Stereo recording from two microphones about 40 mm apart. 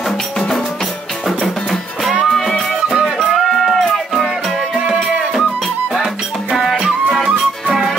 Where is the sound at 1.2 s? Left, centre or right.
Centre.